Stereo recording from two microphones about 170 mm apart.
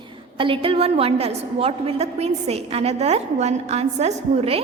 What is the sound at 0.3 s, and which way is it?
A woman's voice, 30° right (ahead or behind).